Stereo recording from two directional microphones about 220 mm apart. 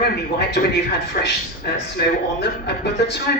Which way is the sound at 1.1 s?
45° left (ahead or behind).